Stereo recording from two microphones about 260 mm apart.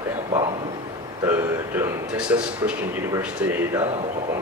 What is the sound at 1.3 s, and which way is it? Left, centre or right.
A man's voice, centre.